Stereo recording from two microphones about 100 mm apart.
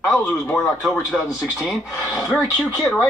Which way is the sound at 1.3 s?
Centre (ahead or behind).